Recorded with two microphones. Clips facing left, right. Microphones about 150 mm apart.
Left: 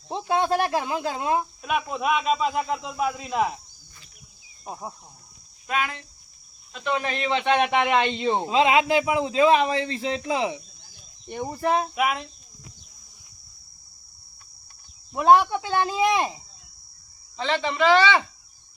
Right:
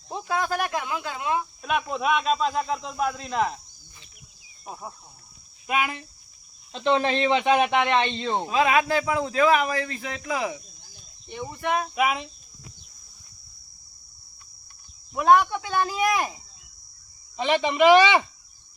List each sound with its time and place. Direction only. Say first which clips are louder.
0.1 s speech: left 4 dB; 25° left (ahead or behind)
1.6 s speech: even; 5° left (ahead or behind)
4.6 s a man's voice: left 2 dB; 20° left (ahead or behind)
5.6 s speech: right 1 dB; 15° right (ahead or behind)
6.7 s speech: right 5 dB; 30° right (ahead or behind)
7.3 s a man's voice: left 2 dB; 5° right (ahead or behind); by 10.6 s 25° left (ahead or behind)
11.3 s speech: left 3 dB; 45° left (ahead or behind)
11.9 s speech: right 1 dB; centre (ahead or behind)
15.1 s a man's voice: left 1 dB; 30° left (ahead or behind)
17.3 s speech: right 3 dB; 15° right (ahead or behind)